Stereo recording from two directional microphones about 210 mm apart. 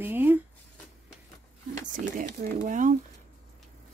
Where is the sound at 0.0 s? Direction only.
10° right (ahead or behind).